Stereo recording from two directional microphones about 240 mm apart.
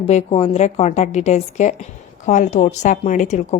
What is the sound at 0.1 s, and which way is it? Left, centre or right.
A woman's voice, left.